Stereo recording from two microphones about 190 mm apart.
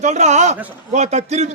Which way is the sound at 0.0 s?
35° right (ahead or behind).